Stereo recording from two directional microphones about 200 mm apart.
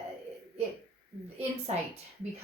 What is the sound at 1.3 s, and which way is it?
Speech, 30° right (ahead or behind).